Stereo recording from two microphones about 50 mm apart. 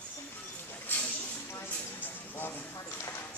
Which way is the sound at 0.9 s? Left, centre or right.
Left.